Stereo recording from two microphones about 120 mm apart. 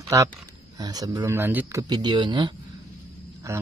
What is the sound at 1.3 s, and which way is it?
Speech, 15° right (ahead or behind).